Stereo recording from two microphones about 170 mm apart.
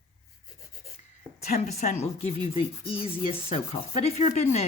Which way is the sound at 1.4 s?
45° left (ahead or behind).